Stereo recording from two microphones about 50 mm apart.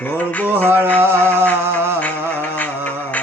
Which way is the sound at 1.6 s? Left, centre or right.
Right.